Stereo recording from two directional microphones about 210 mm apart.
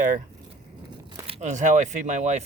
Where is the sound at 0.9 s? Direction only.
25° right (ahead or behind).